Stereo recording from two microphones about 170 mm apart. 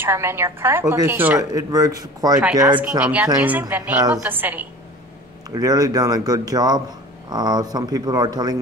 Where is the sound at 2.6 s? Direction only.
10° right (ahead or behind).